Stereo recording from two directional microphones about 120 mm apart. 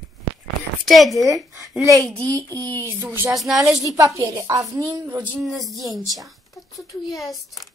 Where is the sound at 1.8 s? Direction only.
25° right (ahead or behind).